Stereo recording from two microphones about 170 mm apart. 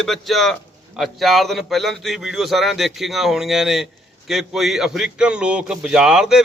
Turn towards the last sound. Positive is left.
turn(degrees=-5)  # may be behind; listen again after turning